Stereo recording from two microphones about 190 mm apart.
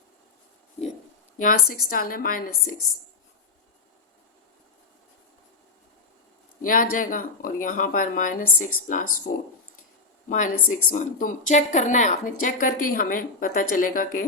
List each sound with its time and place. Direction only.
1.4 s a woman's voice: 45° left (ahead or behind)
6.6 s a woman's voice: 45° left (ahead or behind)